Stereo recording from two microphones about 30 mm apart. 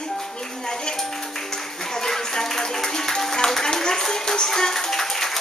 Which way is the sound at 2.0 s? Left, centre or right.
Centre.